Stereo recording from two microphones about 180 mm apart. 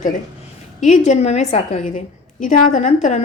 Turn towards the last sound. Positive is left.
turn(degrees=45)  # may be behind; listen again after turning